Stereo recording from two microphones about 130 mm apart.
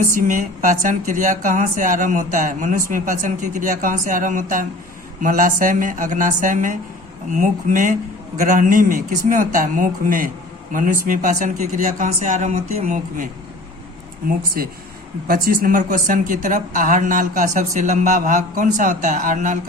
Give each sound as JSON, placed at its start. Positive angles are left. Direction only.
{"t": 0.1, "sound": "a man's voice", "side_deg": -90}
{"t": 14.6, "sound": "a man's voice", "side_deg": -90}